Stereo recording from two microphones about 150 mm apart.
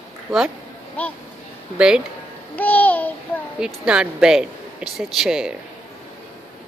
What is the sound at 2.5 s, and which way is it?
Babbling, 10° left (ahead or behind).